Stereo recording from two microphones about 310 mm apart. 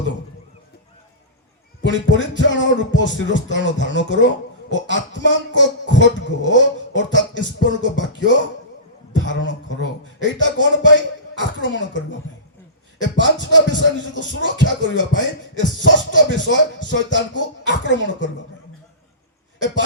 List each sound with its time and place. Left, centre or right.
1.8 s music: left
9.1 s a man's voice: left
10.2 s music: left